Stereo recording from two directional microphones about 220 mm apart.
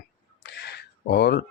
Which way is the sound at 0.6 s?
50° left (ahead or behind).